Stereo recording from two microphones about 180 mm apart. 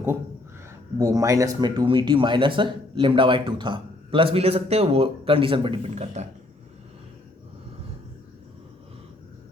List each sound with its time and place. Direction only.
0.9 s speech: 20° right (ahead or behind); by 6.2 s 40° right (ahead or behind)